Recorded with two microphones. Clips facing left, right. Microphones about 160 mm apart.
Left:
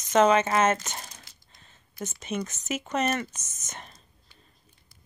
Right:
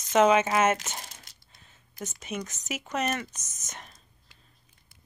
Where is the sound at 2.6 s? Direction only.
Centre (ahead or behind).